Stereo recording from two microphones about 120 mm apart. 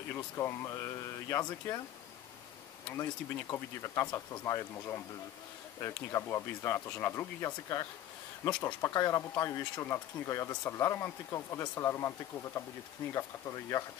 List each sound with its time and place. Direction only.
0.1 s speech: 20° left (ahead or behind)
2.9 s speech: 20° left (ahead or behind)
7.4 s speech: 30° left (ahead or behind)